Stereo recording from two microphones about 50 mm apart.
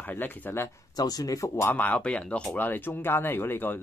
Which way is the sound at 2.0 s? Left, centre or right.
Left.